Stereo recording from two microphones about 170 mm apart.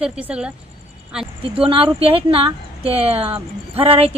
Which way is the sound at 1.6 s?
30° right (ahead or behind).